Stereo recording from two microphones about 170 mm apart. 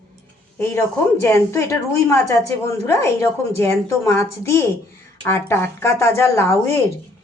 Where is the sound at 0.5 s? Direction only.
15° left (ahead or behind).